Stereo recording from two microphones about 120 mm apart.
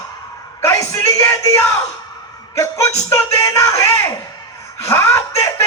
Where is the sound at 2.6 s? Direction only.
25° left (ahead or behind).